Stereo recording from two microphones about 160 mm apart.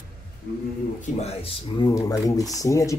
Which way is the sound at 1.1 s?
40° left (ahead or behind).